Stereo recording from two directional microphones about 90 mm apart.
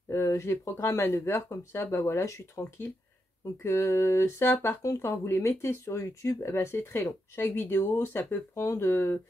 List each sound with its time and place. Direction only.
0.1 s speech: 30° left (ahead or behind)